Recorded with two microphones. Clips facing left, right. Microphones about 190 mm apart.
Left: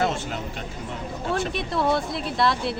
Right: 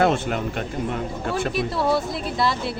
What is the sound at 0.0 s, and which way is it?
Speech, 60° right (ahead or behind).